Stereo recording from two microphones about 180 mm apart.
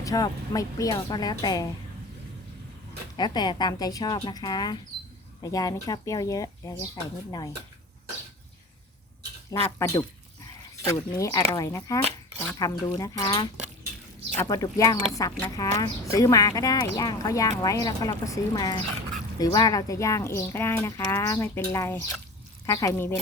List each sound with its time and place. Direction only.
0.0 s speech: 20° left (ahead or behind)
3.2 s speech: 25° left (ahead or behind)
9.5 s speech: 20° left (ahead or behind)